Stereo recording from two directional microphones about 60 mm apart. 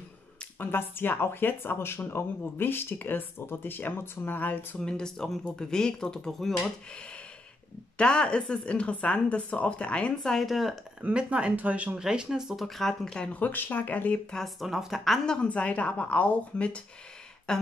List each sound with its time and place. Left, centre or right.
0.6 s speech: left
4.7 s speech: centre
8.0 s a woman's voice: centre
10.4 s a woman's voice: centre
11.0 s speech: centre
12.0 s speech: centre
12.6 s speech: centre
13.3 s a woman's voice: left
14.3 s a woman's voice: centre
15.2 s a woman's voice: centre